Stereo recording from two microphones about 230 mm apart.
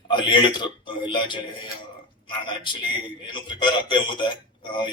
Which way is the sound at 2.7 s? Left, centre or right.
Left.